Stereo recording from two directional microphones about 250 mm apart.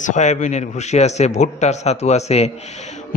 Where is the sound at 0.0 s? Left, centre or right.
Left.